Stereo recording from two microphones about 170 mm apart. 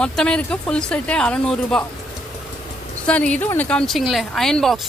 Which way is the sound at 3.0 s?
5° left (ahead or behind).